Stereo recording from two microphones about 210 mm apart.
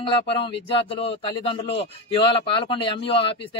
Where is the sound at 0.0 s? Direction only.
25° left (ahead or behind).